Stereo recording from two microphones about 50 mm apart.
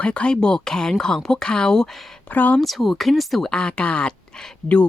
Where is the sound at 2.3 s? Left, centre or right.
Left.